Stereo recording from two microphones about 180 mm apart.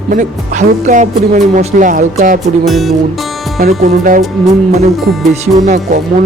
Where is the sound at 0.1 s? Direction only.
45° right (ahead or behind).